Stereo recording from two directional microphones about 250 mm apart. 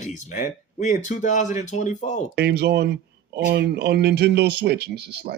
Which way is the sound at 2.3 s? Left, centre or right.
Right.